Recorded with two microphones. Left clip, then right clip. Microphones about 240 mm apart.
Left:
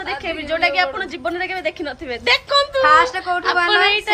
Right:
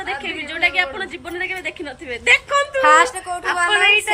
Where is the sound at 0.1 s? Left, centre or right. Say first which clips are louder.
Left 4 dB; centre.